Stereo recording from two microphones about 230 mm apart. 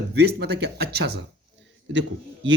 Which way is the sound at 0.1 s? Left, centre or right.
Right.